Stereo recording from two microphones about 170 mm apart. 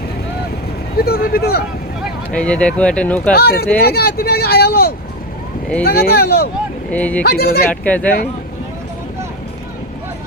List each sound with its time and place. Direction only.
0.9 s speech: 65° left (ahead or behind)
2.3 s speech: 5° left (ahead or behind)
3.3 s speech: 65° left (ahead or behind)
6.9 s speech: 10° left (ahead or behind)
7.2 s speech: 65° left (ahead or behind)
7.7 s speech: 10° left (ahead or behind)